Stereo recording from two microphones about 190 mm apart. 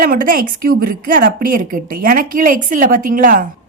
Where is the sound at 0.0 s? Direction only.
50° right (ahead or behind).